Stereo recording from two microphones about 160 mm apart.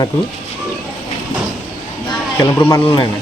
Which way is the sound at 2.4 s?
15° left (ahead or behind).